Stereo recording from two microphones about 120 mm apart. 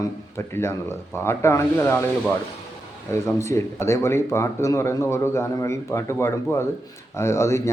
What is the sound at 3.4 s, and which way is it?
A man's voice, 25° left (ahead or behind).